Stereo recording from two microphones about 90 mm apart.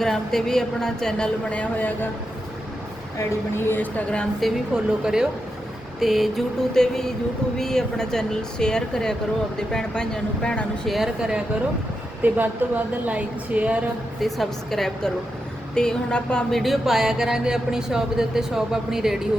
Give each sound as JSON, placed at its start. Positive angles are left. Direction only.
{"t": 0.0, "sound": "speech", "side_deg": 5}
{"t": 3.6, "sound": "speech", "side_deg": 20}
{"t": 4.4, "sound": "a woman's voice", "side_deg": -5}
{"t": 10.8, "sound": "a woman's voice", "side_deg": 0}
{"t": 14.2, "sound": "speech", "side_deg": 0}